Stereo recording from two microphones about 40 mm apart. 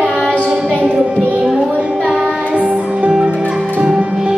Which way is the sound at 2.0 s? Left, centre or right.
Right.